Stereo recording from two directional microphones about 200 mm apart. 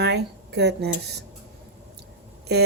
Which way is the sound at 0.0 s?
55° right (ahead or behind).